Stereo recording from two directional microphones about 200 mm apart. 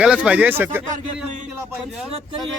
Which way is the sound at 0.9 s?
40° right (ahead or behind).